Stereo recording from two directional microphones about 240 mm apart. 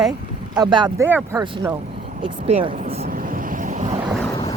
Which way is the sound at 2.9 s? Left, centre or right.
Right.